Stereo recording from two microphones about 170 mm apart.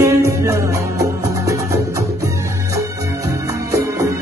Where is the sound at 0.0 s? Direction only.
15° right (ahead or behind).